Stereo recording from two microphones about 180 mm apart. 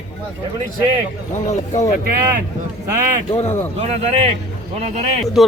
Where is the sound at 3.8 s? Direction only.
35° right (ahead or behind).